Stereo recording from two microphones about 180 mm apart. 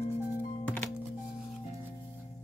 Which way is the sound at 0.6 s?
5° left (ahead or behind).